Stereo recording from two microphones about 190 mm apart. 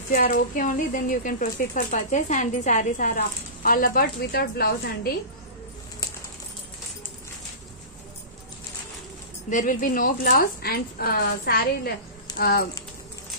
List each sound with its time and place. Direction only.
0.1 s speech: 45° left (ahead or behind)
9.5 s speech: 45° left (ahead or behind)